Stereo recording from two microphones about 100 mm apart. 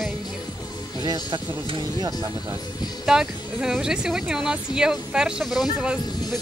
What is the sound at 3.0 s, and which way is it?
Speech, 5° right (ahead or behind).